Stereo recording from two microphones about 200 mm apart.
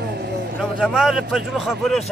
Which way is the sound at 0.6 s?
Centre (ahead or behind).